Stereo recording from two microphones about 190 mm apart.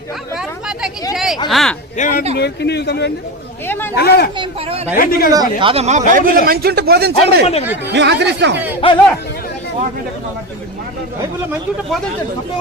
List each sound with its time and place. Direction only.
1.1 s a sound: centre (ahead or behind)
1.5 s speech: centre (ahead or behind)
2.0 s speech: 45° left (ahead or behind)
2.4 s a man's voice: 60° left (ahead or behind)
5.3 s speech: 20° right (ahead or behind); by 8.5 s 65° right (ahead or behind)
8.5 s speech: 10° right (ahead or behind)